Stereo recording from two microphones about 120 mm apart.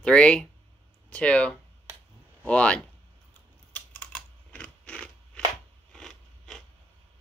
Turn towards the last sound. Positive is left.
turn(degrees=5)  # may be behind; listen again after turning